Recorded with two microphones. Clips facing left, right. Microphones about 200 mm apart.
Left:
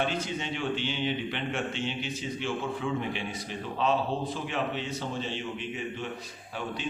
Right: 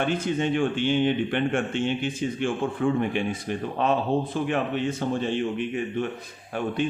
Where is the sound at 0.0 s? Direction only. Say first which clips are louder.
Right 6 dB; 50° right (ahead or behind).